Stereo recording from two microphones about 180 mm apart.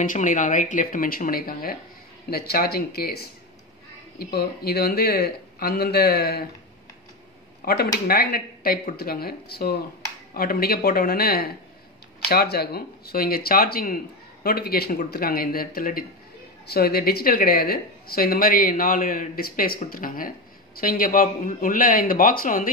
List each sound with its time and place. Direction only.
0.0 s a man's voice: 45° left (ahead or behind)
7.6 s a man's voice: 60° left (ahead or behind)